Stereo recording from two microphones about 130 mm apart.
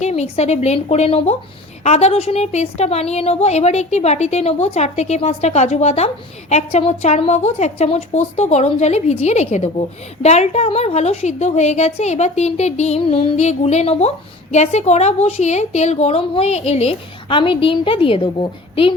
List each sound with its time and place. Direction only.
0.0 s a woman's voice: 60° left (ahead or behind)
13.0 s a woman's voice: 50° left (ahead or behind)